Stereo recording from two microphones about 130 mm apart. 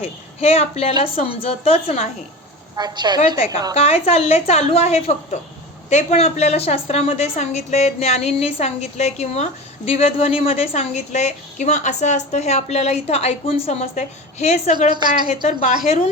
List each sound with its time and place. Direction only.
0.0 s a woman's voice: 55° left (ahead or behind)
2.7 s a woman's voice: 35° right (ahead or behind)
3.8 s a woman's voice: 55° left (ahead or behind)